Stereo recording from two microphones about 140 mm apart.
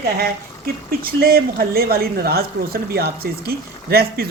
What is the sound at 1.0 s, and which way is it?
Speech, 90° right.